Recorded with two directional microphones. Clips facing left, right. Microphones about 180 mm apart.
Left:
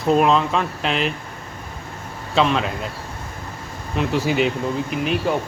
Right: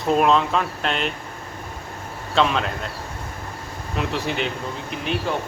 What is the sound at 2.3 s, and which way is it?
Speech, centre (ahead or behind).